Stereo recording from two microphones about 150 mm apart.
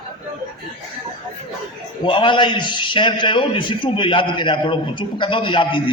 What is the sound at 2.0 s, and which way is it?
A man's voice, 35° left (ahead or behind).